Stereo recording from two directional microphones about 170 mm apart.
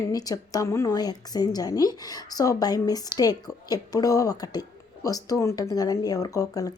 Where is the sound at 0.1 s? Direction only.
20° left (ahead or behind).